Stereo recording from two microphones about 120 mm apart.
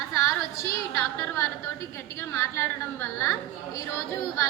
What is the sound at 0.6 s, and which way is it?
A woman's voice, 25° left (ahead or behind).